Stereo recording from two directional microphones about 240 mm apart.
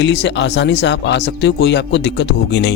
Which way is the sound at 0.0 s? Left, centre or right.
Left.